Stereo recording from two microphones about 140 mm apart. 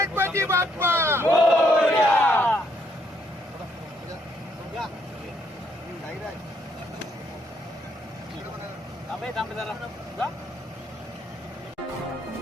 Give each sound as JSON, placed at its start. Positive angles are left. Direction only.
{"t": 0.0, "sound": "vehicle", "side_deg": -15}
{"t": 1.5, "sound": "battle cry", "side_deg": -5}
{"t": 1.9, "sound": "battle cry", "side_deg": 15}
{"t": 9.2, "sound": "speech", "side_deg": 0}